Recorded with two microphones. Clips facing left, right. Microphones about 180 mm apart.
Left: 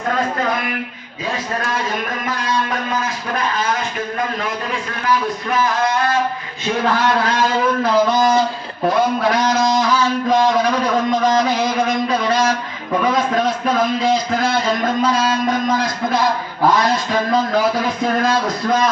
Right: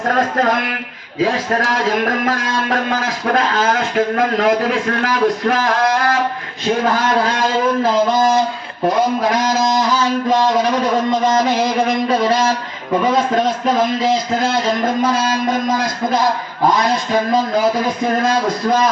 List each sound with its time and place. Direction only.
0.1 s a man's voice: 60° right (ahead or behind)
1.2 s a man's voice: 85° right
12.0 s a man's voice: 30° right (ahead or behind)